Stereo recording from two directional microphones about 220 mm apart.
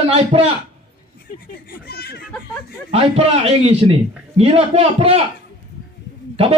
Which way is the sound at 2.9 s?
25° right (ahead or behind).